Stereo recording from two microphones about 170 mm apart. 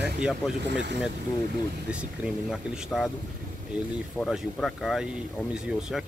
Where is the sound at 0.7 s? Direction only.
90° right.